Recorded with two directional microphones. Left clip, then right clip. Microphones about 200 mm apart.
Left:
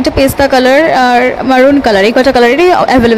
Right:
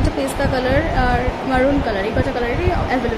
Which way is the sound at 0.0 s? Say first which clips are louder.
Left 12 dB; 45° left (ahead or behind).